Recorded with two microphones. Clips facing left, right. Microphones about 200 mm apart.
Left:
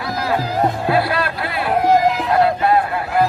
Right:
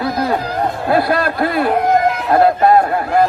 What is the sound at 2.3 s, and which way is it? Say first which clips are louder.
Speech: right 7 dB; 45° right (ahead or behind).